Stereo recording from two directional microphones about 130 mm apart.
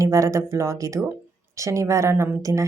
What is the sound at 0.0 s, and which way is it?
Speech, 25° right (ahead or behind).